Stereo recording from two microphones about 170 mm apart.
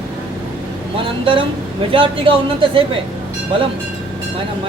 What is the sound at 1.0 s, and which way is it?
A man's voice, 30° right (ahead or behind).